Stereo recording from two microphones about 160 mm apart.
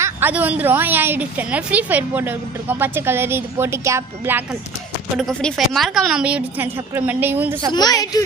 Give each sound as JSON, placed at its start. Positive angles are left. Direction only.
{"t": 0.0, "sound": "a woman's voice", "side_deg": -10}
{"t": 5.1, "sound": "a woman's voice", "side_deg": 5}
{"t": 7.7, "sound": "a woman's voice", "side_deg": 25}